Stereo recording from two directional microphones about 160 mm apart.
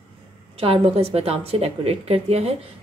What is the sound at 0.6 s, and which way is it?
A woman's voice, 35° right (ahead or behind).